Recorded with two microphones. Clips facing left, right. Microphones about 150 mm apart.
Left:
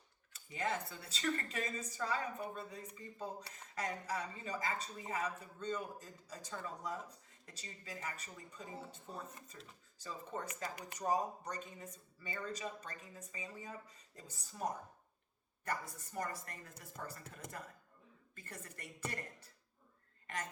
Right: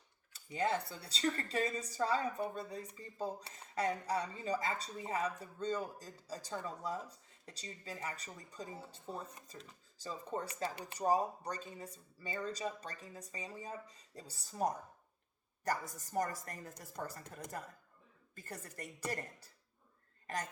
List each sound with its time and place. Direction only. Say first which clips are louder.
0.3 s speech: right 4 dB; 35° right (ahead or behind)
18.3 s speech: right 4 dB; 35° right (ahead or behind)